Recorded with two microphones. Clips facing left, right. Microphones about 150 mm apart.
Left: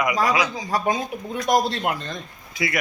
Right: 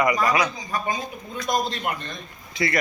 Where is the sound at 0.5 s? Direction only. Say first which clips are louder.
Left 4 dB; 80° left.